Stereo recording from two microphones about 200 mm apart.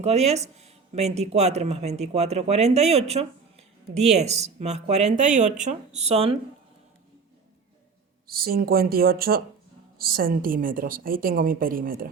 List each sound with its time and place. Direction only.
0.0 s speech: 35° right (ahead or behind)
8.3 s a woman's voice: 50° right (ahead or behind)